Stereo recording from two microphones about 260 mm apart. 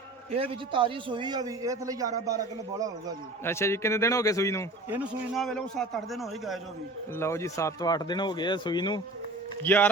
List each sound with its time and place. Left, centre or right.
0.3 s a man's voice: right
3.4 s speech: centre
4.9 s a man's voice: centre
7.2 s speech: centre